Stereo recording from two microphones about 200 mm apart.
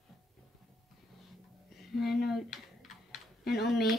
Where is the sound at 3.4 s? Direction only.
55° left (ahead or behind).